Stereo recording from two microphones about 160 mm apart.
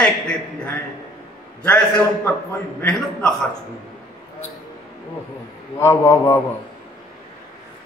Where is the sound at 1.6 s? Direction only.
5° left (ahead or behind).